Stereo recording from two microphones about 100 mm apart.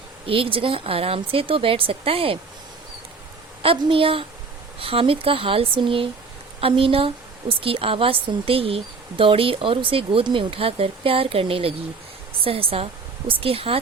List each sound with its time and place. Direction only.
0.3 s speech: 65° right (ahead or behind)
3.6 s a woman's voice: 65° right (ahead or behind)